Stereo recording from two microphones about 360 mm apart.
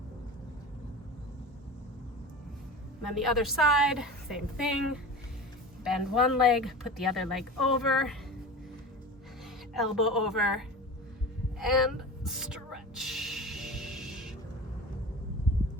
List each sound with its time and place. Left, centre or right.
3.2 s speech: centre
5.8 s speech: centre
9.7 s speech: centre
11.6 s music: centre